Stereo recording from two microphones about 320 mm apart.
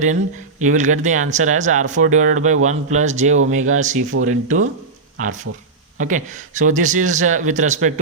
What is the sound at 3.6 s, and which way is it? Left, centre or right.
Speech, right.